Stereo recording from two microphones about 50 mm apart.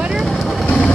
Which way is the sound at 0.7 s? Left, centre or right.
Left.